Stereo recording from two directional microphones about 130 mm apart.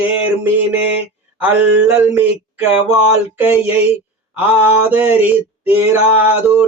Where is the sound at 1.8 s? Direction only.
15° right (ahead or behind).